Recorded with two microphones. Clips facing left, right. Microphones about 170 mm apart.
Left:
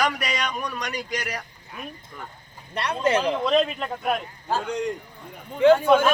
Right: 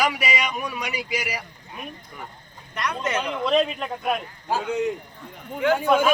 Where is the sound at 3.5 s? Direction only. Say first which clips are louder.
Even; centre (ahead or behind).